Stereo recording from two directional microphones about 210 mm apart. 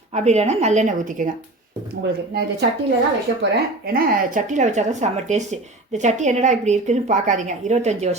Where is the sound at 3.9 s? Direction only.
40° right (ahead or behind).